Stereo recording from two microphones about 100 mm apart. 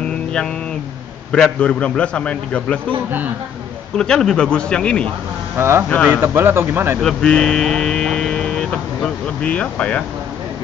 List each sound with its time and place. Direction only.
1.3 s speech: 5° left (ahead or behind)
3.1 s speech: 20° right (ahead or behind)
3.9 s speech: 5° left (ahead or behind)
5.6 s speech: 25° right (ahead or behind)
7.0 s speech: 5° left (ahead or behind)